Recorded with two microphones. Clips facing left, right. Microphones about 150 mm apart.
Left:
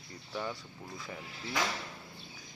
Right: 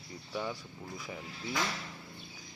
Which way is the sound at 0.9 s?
10° right (ahead or behind).